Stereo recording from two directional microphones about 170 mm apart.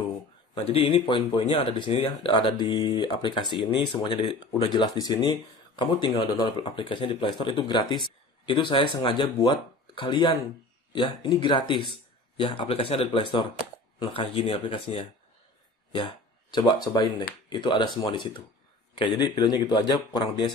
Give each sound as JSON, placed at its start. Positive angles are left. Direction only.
{"t": 0.7, "sound": "speech", "side_deg": 30}